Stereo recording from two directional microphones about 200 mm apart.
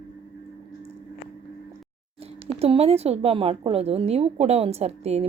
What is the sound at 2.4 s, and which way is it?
A woman's voice, 30° right (ahead or behind).